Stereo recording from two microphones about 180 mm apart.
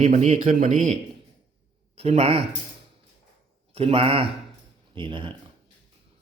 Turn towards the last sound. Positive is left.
turn(degrees=-25)  # may be behind; listen again after turning